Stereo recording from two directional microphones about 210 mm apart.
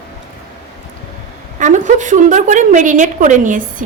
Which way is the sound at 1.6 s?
35° right (ahead or behind).